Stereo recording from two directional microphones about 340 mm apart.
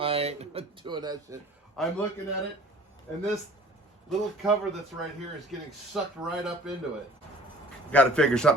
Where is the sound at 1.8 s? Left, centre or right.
Centre.